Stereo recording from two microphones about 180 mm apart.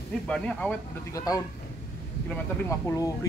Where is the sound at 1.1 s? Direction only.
20° left (ahead or behind).